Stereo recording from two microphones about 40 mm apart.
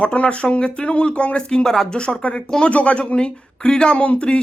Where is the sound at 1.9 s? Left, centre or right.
Left.